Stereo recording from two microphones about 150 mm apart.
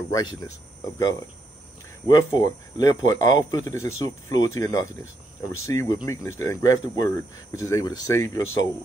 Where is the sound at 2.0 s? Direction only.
30° left (ahead or behind).